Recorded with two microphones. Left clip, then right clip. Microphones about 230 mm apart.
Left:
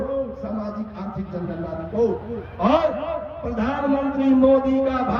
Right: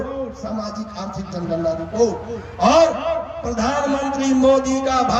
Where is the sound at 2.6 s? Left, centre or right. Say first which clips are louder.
Right 5 dB; right.